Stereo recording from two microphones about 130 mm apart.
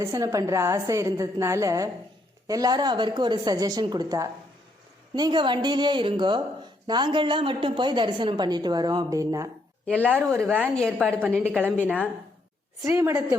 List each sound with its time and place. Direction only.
0.0 s a woman's voice: 25° right (ahead or behind)
9.8 s speech: 10° left (ahead or behind)
10.1 s a woman's voice: 15° right (ahead or behind)